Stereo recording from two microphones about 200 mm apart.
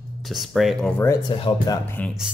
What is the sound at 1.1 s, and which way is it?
Speech, 25° left (ahead or behind).